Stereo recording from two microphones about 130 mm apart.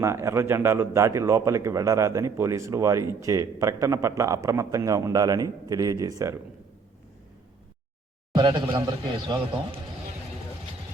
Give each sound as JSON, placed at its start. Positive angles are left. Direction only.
{"t": 0.0, "sound": "a man's voice", "side_deg": -20}
{"t": 8.3, "sound": "a man's voice", "side_deg": -35}